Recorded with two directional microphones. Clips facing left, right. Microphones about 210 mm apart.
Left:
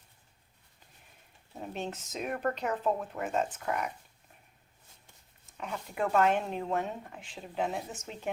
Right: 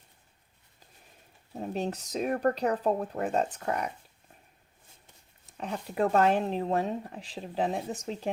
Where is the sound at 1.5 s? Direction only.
35° right (ahead or behind).